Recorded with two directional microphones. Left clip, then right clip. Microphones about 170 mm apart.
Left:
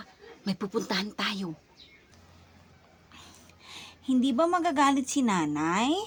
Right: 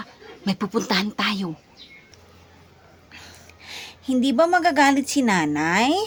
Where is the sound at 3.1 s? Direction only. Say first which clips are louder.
Right 8 dB; 10° right (ahead or behind).